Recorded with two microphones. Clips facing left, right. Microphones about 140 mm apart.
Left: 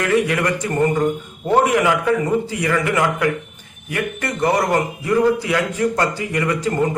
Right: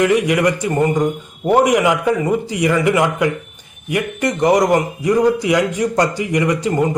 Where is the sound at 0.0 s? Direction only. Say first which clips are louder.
Right 4 dB; 15° right (ahead or behind).